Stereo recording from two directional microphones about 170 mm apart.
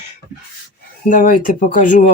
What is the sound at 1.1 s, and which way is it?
Speech, 50° left (ahead or behind).